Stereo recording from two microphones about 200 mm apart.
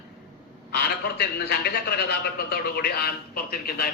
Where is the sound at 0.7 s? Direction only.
50° left (ahead or behind).